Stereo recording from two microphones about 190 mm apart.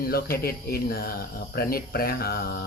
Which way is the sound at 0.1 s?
55° left (ahead or behind).